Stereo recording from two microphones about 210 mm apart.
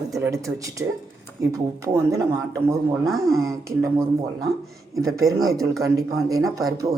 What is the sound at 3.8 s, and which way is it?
A man's voice, 15° right (ahead or behind).